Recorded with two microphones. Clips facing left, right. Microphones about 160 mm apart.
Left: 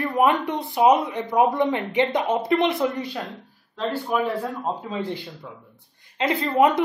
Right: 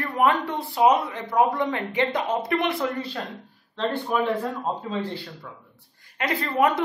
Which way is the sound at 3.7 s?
5° left (ahead or behind).